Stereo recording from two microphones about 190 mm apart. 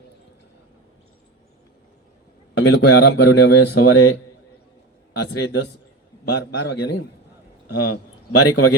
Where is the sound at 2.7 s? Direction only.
65° left (ahead or behind); by 4.1 s 90° left.